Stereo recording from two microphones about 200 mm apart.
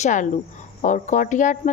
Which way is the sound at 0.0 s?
40° left (ahead or behind).